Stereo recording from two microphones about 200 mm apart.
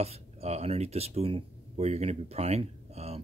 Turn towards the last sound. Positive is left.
turn(degrees=-30)  # may be behind; listen again after turning